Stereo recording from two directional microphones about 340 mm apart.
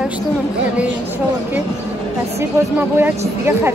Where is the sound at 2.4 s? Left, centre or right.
Centre.